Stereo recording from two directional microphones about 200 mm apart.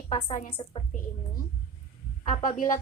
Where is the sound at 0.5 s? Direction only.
25° left (ahead or behind).